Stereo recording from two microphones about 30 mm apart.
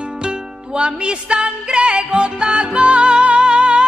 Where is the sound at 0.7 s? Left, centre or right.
Right.